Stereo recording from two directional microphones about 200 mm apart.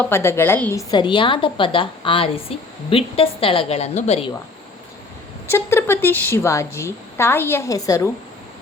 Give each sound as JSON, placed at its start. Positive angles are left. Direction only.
{"t": 0.0, "sound": "a woman's voice", "side_deg": 10}
{"t": 5.5, "sound": "a woman's voice", "side_deg": 10}